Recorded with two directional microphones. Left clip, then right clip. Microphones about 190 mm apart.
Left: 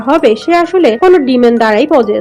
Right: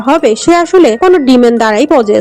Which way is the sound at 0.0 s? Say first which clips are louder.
Right 1 dB; 45° right (ahead or behind).